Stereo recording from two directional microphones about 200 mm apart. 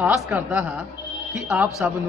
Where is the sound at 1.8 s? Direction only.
10° right (ahead or behind).